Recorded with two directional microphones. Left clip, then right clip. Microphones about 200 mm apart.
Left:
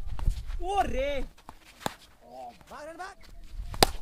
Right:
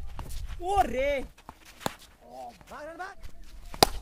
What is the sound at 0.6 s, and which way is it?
Speech, 20° right (ahead or behind).